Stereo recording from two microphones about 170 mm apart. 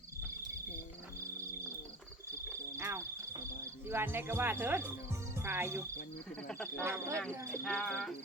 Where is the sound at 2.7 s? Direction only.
15° right (ahead or behind).